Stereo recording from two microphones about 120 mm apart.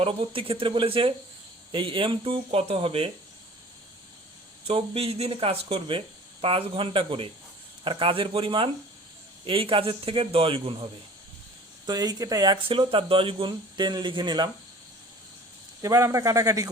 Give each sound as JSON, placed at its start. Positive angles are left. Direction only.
{"t": 0.0, "sound": "a man's voice", "side_deg": -50}
{"t": 4.6, "sound": "a man's voice", "side_deg": -55}
{"t": 11.9, "sound": "speech", "side_deg": -35}
{"t": 12.6, "sound": "speech", "side_deg": -50}
{"t": 15.8, "sound": "speech", "side_deg": -25}